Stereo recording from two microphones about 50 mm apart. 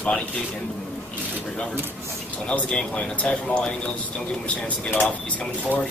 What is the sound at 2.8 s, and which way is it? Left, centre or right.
Speech, left.